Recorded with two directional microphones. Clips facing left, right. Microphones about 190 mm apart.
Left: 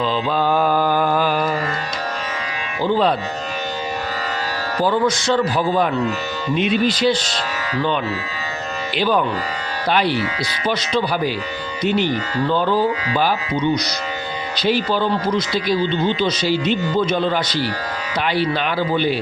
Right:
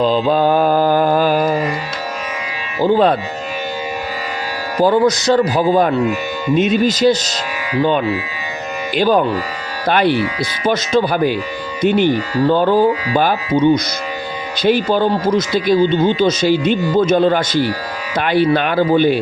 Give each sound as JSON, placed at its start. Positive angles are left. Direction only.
{"t": 0.0, "sound": "mantra", "side_deg": -40}
{"t": 2.8, "sound": "speech", "side_deg": -50}
{"t": 4.8, "sound": "a man's voice", "side_deg": -40}
{"t": 9.0, "sound": "speech", "side_deg": -45}
{"t": 9.9, "sound": "speech", "side_deg": -55}
{"t": 12.4, "sound": "speech", "side_deg": -45}